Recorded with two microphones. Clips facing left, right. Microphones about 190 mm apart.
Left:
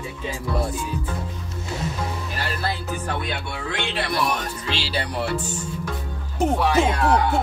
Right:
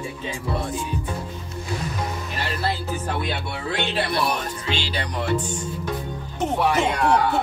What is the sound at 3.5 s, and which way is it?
Music, 35° right (ahead or behind).